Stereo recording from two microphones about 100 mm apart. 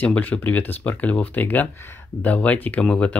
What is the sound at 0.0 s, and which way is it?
Speech, 15° left (ahead or behind).